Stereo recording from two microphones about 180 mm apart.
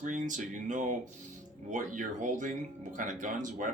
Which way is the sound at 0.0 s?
45° right (ahead or behind).